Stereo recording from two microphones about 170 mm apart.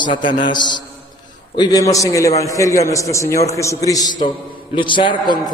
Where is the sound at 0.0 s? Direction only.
30° left (ahead or behind).